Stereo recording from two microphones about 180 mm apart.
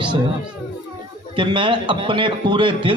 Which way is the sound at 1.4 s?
25° right (ahead or behind).